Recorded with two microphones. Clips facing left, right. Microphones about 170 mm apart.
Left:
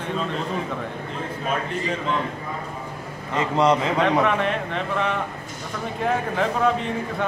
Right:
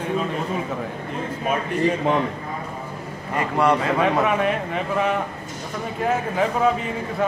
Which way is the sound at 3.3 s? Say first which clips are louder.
Even; 20° left (ahead or behind).